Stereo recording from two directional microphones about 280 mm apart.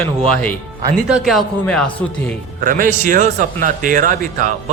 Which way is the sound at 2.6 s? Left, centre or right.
Right.